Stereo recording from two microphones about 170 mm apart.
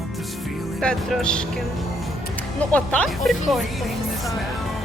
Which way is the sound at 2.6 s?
5° left (ahead or behind).